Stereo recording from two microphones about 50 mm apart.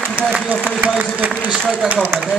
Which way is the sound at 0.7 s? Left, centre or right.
Right.